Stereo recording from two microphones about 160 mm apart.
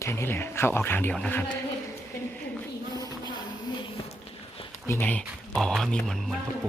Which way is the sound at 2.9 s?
25° left (ahead or behind).